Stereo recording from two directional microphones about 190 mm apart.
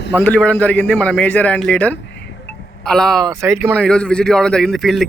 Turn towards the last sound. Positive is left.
turn(degrees=0)  # may be behind; listen again after turning